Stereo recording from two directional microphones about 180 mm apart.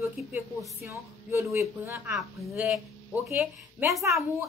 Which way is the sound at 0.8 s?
15° right (ahead or behind).